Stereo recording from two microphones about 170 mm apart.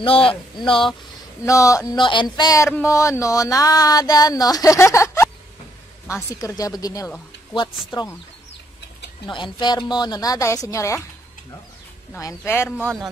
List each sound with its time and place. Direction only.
0.0 s speech: 30° left (ahead or behind)
1.4 s speech: 20° left (ahead or behind)
6.3 s speech: 20° left (ahead or behind)
9.3 s speech: 25° left (ahead or behind)
12.1 s speech: 15° left (ahead or behind)
12.8 s speech: centre (ahead or behind)